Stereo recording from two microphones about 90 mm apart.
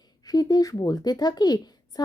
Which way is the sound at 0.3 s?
45° left (ahead or behind).